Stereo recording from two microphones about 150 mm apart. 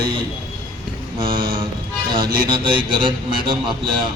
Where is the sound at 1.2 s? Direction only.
35° right (ahead or behind).